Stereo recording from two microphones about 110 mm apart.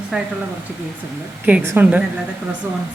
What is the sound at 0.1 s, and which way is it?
Speech, 10° right (ahead or behind).